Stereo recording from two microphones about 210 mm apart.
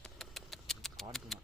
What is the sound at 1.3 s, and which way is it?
Typewriter, centre (ahead or behind).